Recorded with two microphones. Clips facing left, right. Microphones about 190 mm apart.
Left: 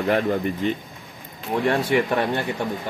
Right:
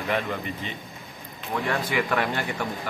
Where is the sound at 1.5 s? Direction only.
30° left (ahead or behind).